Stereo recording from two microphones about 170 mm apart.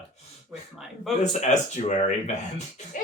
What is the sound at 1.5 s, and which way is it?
Speech, 45° left (ahead or behind).